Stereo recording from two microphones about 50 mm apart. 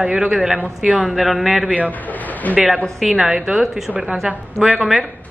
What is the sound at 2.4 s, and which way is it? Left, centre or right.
Speech, left.